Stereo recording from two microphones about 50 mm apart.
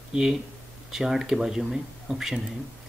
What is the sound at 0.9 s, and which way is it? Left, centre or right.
Speech, centre.